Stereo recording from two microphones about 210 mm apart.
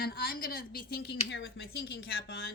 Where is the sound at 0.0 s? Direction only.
45° left (ahead or behind).